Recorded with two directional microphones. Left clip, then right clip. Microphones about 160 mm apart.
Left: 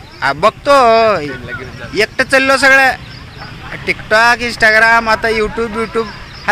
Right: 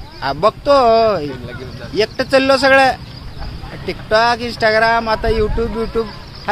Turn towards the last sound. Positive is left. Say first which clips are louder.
# left 3 dB
turn(degrees=10)  # may be behind; listen again after turning